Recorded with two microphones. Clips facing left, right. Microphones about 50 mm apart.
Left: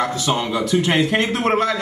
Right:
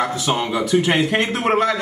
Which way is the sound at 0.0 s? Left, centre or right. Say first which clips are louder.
Even; centre.